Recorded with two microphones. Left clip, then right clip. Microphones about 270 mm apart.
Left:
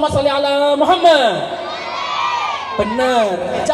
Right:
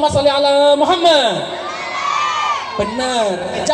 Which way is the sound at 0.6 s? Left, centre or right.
Left.